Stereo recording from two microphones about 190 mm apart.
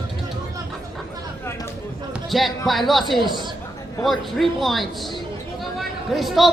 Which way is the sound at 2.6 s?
Centre (ahead or behind).